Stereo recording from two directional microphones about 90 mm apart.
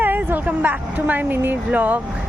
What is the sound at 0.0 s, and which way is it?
Speech, 20° right (ahead or behind).